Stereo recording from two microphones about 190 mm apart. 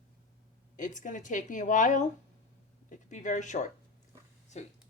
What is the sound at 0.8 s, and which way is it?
Speech, 40° left (ahead or behind).